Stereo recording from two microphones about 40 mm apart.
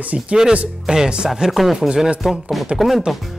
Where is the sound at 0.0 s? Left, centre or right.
Right.